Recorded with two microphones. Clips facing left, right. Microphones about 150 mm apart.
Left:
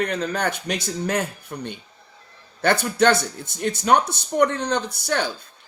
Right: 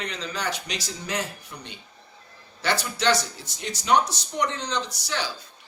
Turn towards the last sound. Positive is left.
turn(degrees=55)  # may be behind; listen again after turning